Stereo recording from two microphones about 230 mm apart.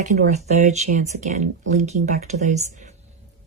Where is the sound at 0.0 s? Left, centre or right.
Right.